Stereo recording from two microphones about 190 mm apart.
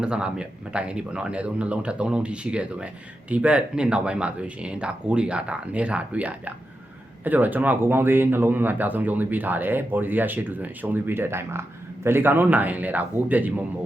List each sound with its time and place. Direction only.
0.0 s speech: 5° right (ahead or behind)